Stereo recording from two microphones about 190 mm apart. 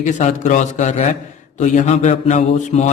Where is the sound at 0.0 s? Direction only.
40° left (ahead or behind).